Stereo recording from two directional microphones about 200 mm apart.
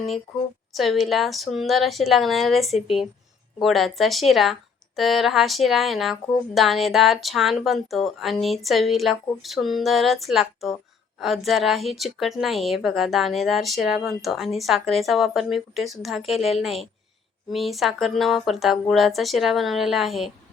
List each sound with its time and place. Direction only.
0.7 s a woman's voice: centre (ahead or behind)